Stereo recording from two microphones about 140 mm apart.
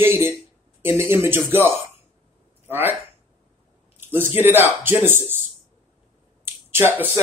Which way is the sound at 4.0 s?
15° right (ahead or behind).